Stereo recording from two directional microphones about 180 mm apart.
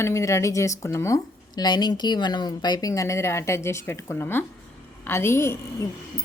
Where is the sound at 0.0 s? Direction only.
15° left (ahead or behind).